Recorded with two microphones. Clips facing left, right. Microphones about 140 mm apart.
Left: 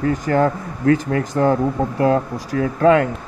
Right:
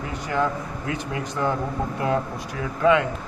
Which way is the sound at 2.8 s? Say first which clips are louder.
Left 5 dB; 50° left (ahead or behind).